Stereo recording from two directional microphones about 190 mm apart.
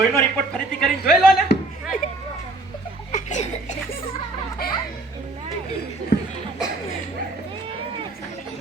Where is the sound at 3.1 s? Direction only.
40° left (ahead or behind).